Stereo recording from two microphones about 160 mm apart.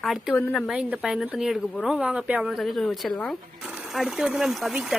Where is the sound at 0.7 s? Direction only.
5° right (ahead or behind).